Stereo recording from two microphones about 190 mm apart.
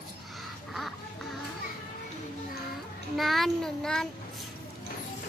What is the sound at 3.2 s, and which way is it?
Speech, centre (ahead or behind).